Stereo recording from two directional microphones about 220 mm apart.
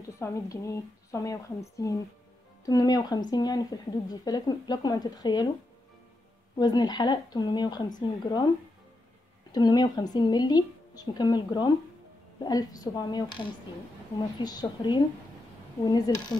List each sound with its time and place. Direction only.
0.2 s speech: 15° left (ahead or behind)
6.5 s a woman's voice: 20° left (ahead or behind)
9.5 s a woman's voice: 20° left (ahead or behind)